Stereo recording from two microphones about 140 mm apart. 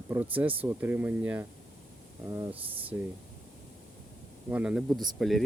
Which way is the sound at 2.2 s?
25° right (ahead or behind).